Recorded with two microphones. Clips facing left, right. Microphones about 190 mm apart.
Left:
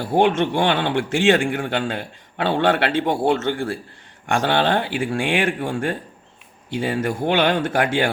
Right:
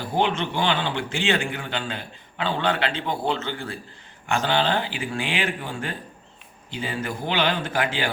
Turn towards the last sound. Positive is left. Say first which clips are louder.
# left 5 dB
turn(degrees=50)  # may be behind; listen again after turning